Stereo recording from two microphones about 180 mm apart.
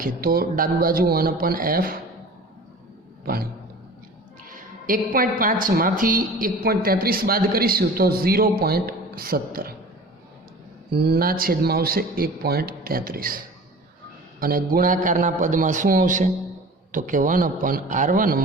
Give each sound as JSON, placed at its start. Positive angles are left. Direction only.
{"t": 0.0, "sound": "speech", "side_deg": -55}
{"t": 4.4, "sound": "a woman's voice", "side_deg": -50}
{"t": 10.9, "sound": "a woman's voice", "side_deg": -60}